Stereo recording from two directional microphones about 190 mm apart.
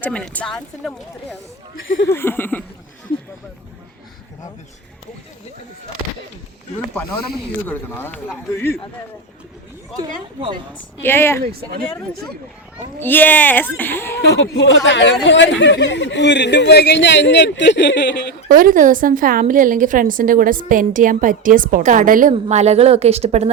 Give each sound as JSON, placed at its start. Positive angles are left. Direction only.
{"t": 0.0, "sound": "speech", "side_deg": 5}
{"t": 7.7, "sound": "speech", "side_deg": 10}
{"t": 10.0, "sound": "speech", "side_deg": -25}
{"t": 11.0, "sound": "speech", "side_deg": 10}
{"t": 13.0, "sound": "speech", "side_deg": 10}
{"t": 14.2, "sound": "speech", "side_deg": 65}
{"t": 18.4, "sound": "a woman's voice", "side_deg": -45}